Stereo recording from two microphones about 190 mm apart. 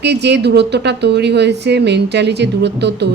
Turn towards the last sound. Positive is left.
turn(degrees=-65)  # may be behind; listen again after turning